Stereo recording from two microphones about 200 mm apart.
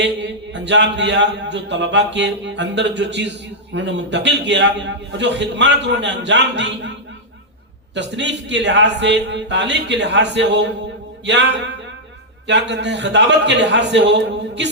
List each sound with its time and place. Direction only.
0.0 s speech: 60° right (ahead or behind)
7.9 s speech: 60° right (ahead or behind)